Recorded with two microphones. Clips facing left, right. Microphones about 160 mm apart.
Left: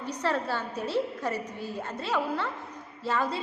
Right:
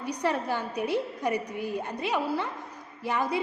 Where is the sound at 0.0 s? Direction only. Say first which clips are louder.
Right 1 dB; 15° right (ahead or behind).